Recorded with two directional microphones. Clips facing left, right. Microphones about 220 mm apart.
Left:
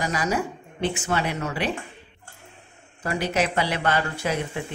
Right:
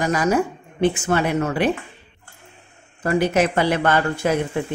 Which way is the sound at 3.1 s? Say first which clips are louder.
Right 6 dB; 50° right (ahead or behind).